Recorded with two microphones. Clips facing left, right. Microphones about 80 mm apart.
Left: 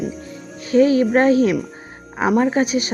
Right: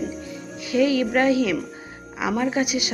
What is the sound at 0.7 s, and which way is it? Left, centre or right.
A woman's voice, left.